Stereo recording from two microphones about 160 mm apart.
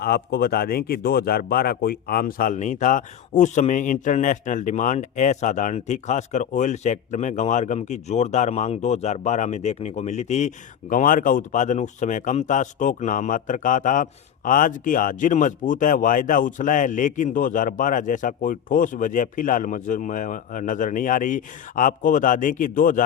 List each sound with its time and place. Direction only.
0.0 s speech: 75° left (ahead or behind); by 23.0 s 60° left (ahead or behind)